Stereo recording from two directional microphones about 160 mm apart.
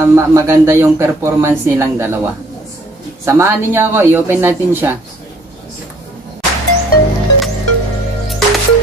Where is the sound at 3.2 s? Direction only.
15° right (ahead or behind).